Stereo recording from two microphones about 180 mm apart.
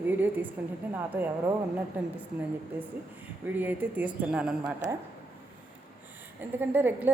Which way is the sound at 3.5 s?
10° right (ahead or behind).